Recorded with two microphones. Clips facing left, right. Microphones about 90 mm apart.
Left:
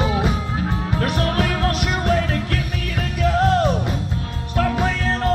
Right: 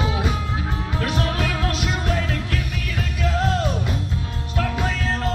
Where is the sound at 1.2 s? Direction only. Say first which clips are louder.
Left 3 dB; 40° left (ahead or behind).